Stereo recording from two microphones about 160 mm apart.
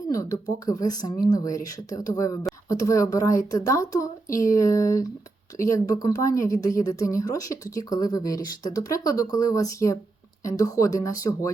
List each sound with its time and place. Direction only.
0.1 s a woman's voice: 20° left (ahead or behind)